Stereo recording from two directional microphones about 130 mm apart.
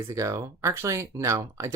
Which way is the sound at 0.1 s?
25° right (ahead or behind).